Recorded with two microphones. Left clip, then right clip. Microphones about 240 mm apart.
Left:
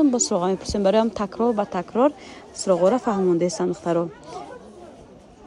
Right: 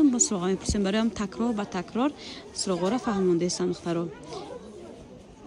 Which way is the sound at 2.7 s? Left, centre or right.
Left.